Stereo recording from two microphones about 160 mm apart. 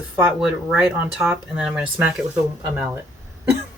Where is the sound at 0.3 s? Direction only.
5° right (ahead or behind).